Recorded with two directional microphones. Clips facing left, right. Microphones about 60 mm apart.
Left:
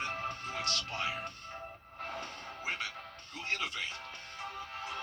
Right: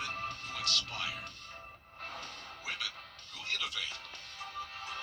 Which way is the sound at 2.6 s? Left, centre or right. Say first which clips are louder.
Left 3 dB; left.